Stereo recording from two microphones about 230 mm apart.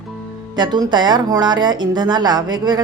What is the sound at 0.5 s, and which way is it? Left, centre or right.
Speech, centre.